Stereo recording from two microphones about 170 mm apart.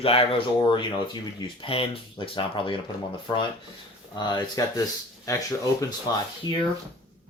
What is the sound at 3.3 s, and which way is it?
Speech, 20° left (ahead or behind).